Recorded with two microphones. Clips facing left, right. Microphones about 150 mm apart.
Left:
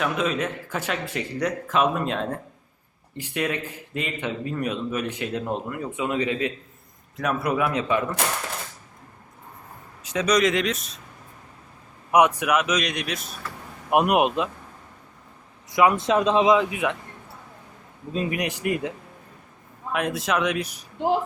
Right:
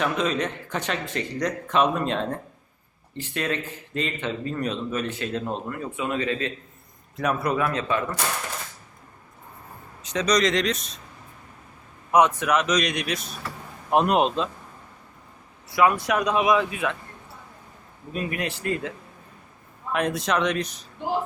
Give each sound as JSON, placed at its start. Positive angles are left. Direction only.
{"t": 0.0, "sound": "speech", "side_deg": 5}
{"t": 7.2, "sound": "a man's voice", "side_deg": 0}
{"t": 7.5, "sound": "speech", "side_deg": 15}
{"t": 10.0, "sound": "speech", "side_deg": 5}
{"t": 12.1, "sound": "speech", "side_deg": 15}
{"t": 13.9, "sound": "speech", "side_deg": 10}
{"t": 15.7, "sound": "speech", "side_deg": 20}
{"t": 18.1, "sound": "speech", "side_deg": 20}
{"t": 19.9, "sound": "a man's voice", "side_deg": 5}